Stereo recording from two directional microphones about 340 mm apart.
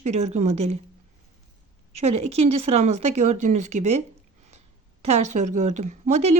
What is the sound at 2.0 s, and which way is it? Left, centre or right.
Speech, centre.